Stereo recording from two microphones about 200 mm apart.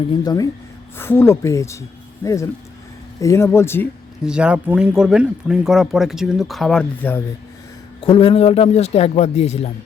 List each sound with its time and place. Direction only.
0.1 s speech: 20° left (ahead or behind)
4.2 s speech: 5° right (ahead or behind)
8.0 s a man's voice: 25° left (ahead or behind)